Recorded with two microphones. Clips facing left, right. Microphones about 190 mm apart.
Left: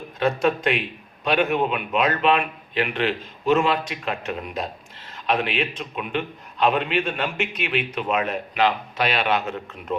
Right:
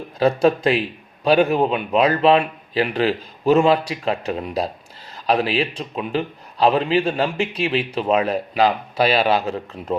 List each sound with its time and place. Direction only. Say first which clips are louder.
0.2 s a man's voice: right 5 dB; 35° right (ahead or behind)